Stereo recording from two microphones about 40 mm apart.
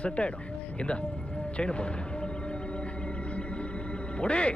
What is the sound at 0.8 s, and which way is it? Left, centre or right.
Music, left.